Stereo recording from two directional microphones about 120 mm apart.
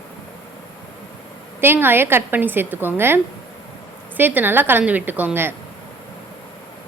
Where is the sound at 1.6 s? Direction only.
20° right (ahead or behind).